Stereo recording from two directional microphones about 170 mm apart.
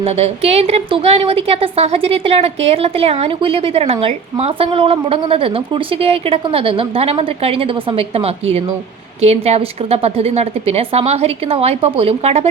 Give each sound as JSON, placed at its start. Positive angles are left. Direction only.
{"t": 0.0, "sound": "a woman's voice", "side_deg": -35}